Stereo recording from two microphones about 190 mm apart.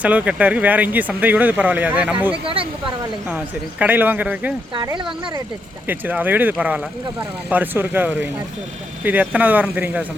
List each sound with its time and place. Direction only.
0.0 s speech: 5° right (ahead or behind)
2.3 s speech: 30° right (ahead or behind)
3.2 s speech: 10° right (ahead or behind)
4.7 s speech: 25° right (ahead or behind)
5.9 s speech: 10° right (ahead or behind)